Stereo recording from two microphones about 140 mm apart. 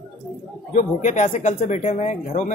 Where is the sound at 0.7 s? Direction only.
60° left (ahead or behind).